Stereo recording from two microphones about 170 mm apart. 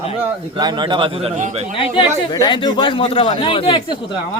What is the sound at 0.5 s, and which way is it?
Speech, 25° right (ahead or behind).